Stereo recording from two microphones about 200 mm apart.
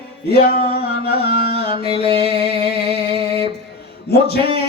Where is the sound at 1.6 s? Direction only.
30° right (ahead or behind).